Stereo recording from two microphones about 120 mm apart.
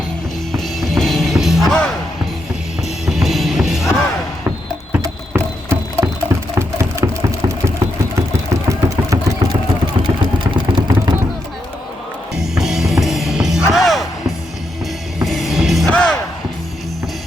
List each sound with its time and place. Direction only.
0.5 s music: centre (ahead or behind)
3.1 s music: centre (ahead or behind)
5.3 s a sound: 20° right (ahead or behind)
10.2 s vehicle: 40° right (ahead or behind)
12.4 s music: 5° right (ahead or behind)
15.9 s battle cry: 5° left (ahead or behind)